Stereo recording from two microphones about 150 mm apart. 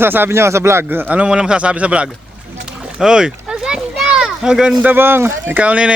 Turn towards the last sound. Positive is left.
turn(degrees=-10)  # may be behind; listen again after turning